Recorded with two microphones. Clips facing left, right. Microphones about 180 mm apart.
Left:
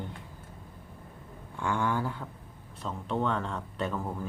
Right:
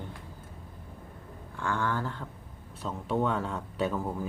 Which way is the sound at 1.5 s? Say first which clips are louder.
Left 1 dB; 15° left (ahead or behind).